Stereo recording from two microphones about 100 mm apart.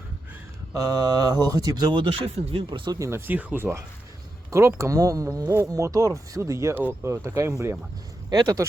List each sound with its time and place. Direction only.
0.7 s speech: 35° right (ahead or behind)
3.0 s speech: 25° right (ahead or behind)
8.3 s speech: 40° right (ahead or behind)